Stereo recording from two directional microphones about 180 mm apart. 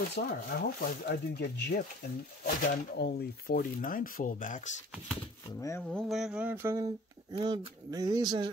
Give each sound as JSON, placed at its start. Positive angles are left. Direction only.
{"t": 0.1, "sound": "speech", "side_deg": 60}
{"t": 5.6, "sound": "speech", "side_deg": 15}
{"t": 5.9, "sound": "a sound", "side_deg": 0}
{"t": 7.3, "sound": "speech", "side_deg": -25}